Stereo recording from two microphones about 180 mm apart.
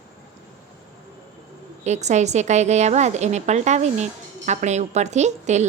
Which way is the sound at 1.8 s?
40° right (ahead or behind).